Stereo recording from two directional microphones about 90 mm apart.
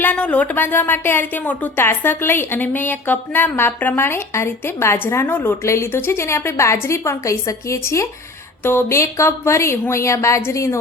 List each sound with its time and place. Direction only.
0.0 s a woman's voice: 15° left (ahead or behind); by 10.8 s 35° left (ahead or behind)